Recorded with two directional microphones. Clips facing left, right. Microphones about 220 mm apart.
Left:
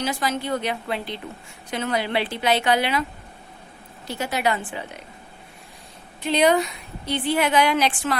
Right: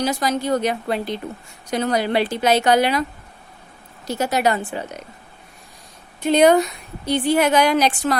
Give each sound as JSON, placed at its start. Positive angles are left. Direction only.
{"t": 0.0, "sound": "a woman's voice", "side_deg": -40}
{"t": 4.0, "sound": "a woman's voice", "side_deg": -40}
{"t": 6.2, "sound": "a woman's voice", "side_deg": -45}